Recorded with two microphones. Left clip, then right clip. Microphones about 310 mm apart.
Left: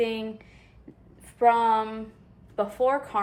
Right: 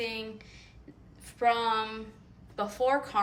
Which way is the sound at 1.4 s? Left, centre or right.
Centre.